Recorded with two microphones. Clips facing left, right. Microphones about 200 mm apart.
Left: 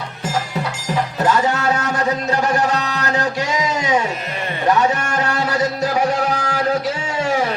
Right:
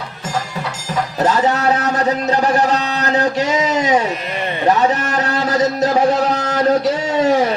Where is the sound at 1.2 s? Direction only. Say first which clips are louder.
Right 3 dB; 35° right (ahead or behind).